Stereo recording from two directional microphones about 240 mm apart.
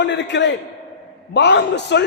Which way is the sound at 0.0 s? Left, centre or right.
Left.